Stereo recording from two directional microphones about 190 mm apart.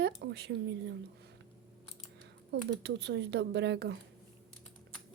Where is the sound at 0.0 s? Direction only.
60° right (ahead or behind).